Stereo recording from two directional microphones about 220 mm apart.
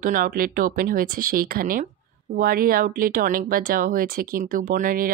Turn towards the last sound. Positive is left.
turn(degrees=-40)  # may be behind; listen again after turning